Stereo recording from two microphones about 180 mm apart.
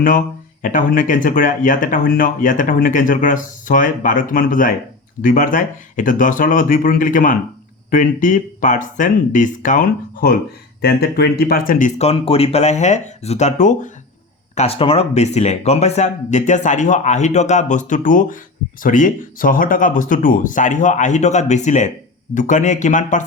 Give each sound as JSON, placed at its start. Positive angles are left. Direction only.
{"t": 0.6, "sound": "speech", "side_deg": 45}
{"t": 11.9, "sound": "speech", "side_deg": 35}